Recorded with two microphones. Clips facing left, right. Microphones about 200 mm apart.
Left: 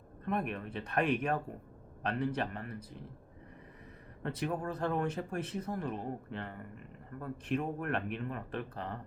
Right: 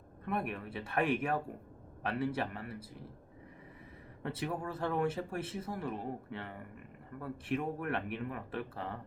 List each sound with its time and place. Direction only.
0.3 s speech: 5° right (ahead or behind)
4.2 s speech: 5° right (ahead or behind)